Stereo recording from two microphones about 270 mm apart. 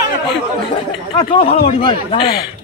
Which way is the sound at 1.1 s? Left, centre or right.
Centre.